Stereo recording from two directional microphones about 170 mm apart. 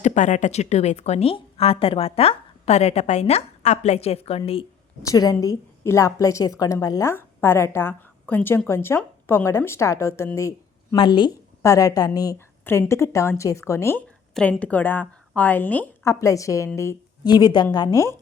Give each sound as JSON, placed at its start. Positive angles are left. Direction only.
{"t": 0.0, "sound": "a woman's voice", "side_deg": 45}
{"t": 5.0, "sound": "a woman's voice", "side_deg": 20}
{"t": 10.9, "sound": "a woman's voice", "side_deg": 30}
{"t": 14.3, "sound": "a woman's voice", "side_deg": 5}